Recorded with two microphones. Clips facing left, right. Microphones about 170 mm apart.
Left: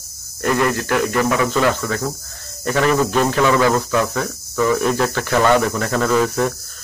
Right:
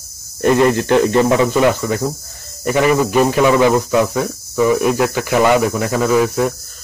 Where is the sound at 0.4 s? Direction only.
20° right (ahead or behind).